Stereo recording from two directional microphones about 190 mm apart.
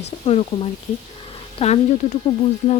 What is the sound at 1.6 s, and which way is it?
Speech, 30° left (ahead or behind).